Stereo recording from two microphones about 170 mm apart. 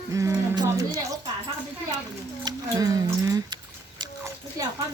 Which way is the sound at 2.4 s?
20° right (ahead or behind).